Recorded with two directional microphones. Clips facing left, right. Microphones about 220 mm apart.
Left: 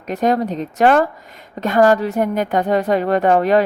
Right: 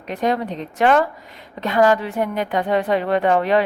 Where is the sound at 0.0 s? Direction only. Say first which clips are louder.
Left 4 dB; 45° left (ahead or behind).